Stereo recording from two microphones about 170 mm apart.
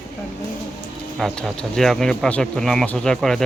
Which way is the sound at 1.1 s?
Centre (ahead or behind).